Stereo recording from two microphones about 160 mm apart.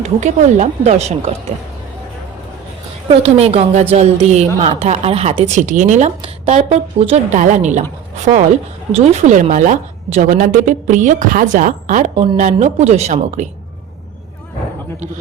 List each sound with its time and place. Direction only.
0.0 s a woman's voice: 50° right (ahead or behind)
3.1 s a woman's voice: 40° right (ahead or behind)
5.5 s a woman's voice: 50° right (ahead or behind)
7.3 s a woman's voice: 50° right (ahead or behind)
9.0 s a woman's voice: 45° right (ahead or behind)